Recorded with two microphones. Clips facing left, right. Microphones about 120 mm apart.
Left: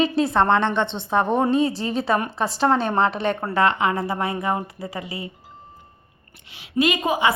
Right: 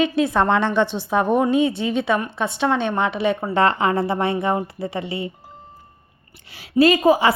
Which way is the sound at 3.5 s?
35° right (ahead or behind).